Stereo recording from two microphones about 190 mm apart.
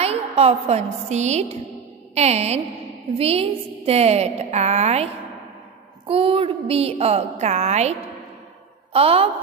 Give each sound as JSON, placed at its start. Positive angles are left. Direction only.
{"t": 0.0, "sound": "a woman's voice", "side_deg": -30}